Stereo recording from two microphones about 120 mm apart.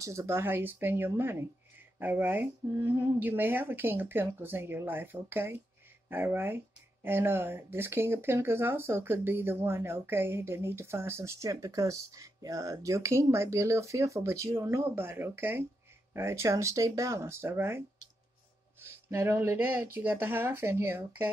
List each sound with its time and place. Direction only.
0.0 s speech: 25° right (ahead or behind)